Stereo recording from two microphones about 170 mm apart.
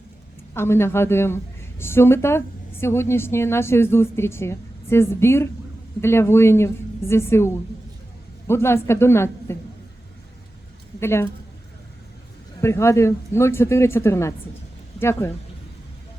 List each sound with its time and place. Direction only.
0.5 s a woman's voice: 15° left (ahead or behind)
11.0 s a woman's voice: 15° left (ahead or behind)
12.6 s a woman's voice: 15° left (ahead or behind)